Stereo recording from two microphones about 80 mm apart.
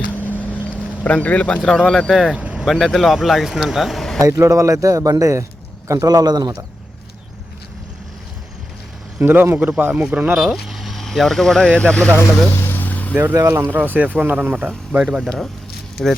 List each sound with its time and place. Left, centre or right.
0.1 s boat: left
1.0 s speech: centre
1.6 s speech: centre
2.4 s vehicle: centre
2.6 s speech: centre
4.2 s a man's voice: right
9.2 s speech: right
10.3 s speech: centre
12.6 s vehicle: left
13.3 s speech: right; by 15.2 s centre
15.2 s speech: centre